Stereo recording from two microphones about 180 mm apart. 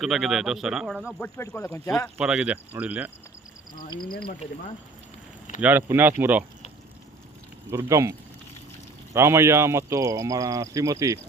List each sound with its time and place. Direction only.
0.0 s speech: centre (ahead or behind)
1.2 s speech: 15° left (ahead or behind)
2.1 s speech: 5° right (ahead or behind)
3.8 s speech: 25° left (ahead or behind)
5.5 s speech: 10° right (ahead or behind)
7.7 s speech: 15° right (ahead or behind)
9.1 s speech: 15° right (ahead or behind)